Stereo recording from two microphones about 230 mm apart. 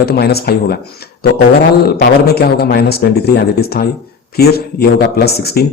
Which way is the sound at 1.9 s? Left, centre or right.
Left.